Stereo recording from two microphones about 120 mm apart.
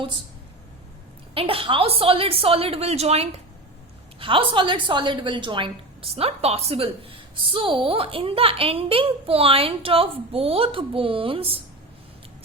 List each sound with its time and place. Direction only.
1.3 s a woman's voice: 50° right (ahead or behind)
4.2 s a woman's voice: 45° right (ahead or behind)